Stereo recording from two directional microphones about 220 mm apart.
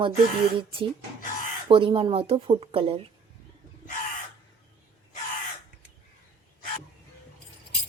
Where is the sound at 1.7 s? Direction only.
25° right (ahead or behind).